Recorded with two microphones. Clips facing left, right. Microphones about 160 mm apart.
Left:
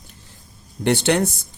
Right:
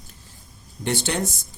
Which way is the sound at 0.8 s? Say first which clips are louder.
Left 7 dB; 65° left (ahead or behind).